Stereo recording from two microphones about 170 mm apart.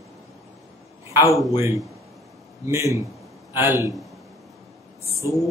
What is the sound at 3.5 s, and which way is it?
Speech, 15° right (ahead or behind).